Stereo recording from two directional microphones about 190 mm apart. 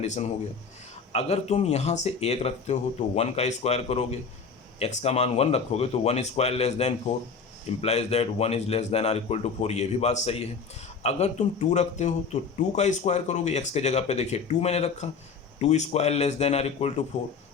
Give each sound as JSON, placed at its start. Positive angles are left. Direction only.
{"t": 0.0, "sound": "speech", "side_deg": 35}